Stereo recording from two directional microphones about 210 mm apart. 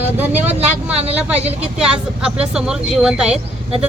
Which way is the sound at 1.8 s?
5° right (ahead or behind).